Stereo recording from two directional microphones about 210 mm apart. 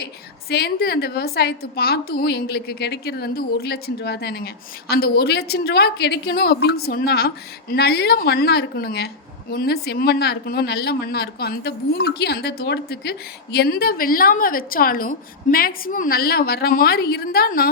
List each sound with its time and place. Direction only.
0.5 s a woman's voice: 50° left (ahead or behind)